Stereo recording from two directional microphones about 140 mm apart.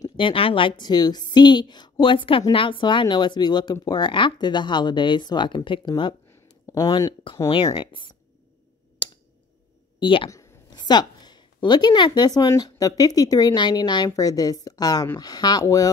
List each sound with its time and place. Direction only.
0.0 s a woman's voice: 40° left (ahead or behind)
7.4 s a woman's voice: 40° left (ahead or behind)
9.0 s a sound: 35° left (ahead or behind)
9.9 s speech: 40° left (ahead or behind)
10.3 s a woman's voice: 25° left (ahead or behind)